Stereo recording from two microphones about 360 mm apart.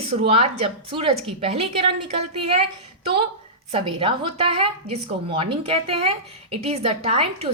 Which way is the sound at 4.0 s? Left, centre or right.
Centre.